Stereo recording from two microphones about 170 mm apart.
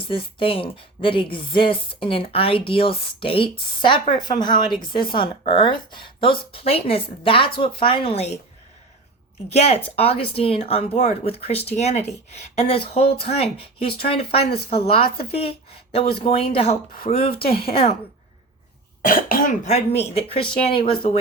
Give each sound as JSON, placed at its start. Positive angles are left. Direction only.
{"t": 0.3, "sound": "speech", "side_deg": 30}
{"t": 9.5, "sound": "speech", "side_deg": 40}
{"t": 19.0, "sound": "speech", "side_deg": 55}